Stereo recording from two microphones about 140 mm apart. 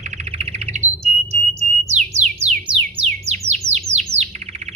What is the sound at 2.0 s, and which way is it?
Music, 55° right (ahead or behind).